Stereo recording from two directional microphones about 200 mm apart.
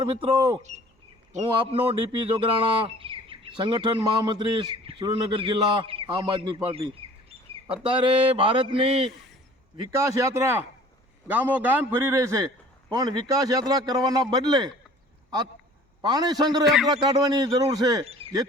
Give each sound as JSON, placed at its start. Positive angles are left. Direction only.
{"t": 0.0, "sound": "speech", "side_deg": -25}
{"t": 7.9, "sound": "speech", "side_deg": -25}
{"t": 9.7, "sound": "a man's voice", "side_deg": -15}
{"t": 16.0, "sound": "speech", "side_deg": -20}
{"t": 16.6, "sound": "a man's voice", "side_deg": 0}
{"t": 16.9, "sound": "speech", "side_deg": -20}
{"t": 18.0, "sound": "speech", "side_deg": -30}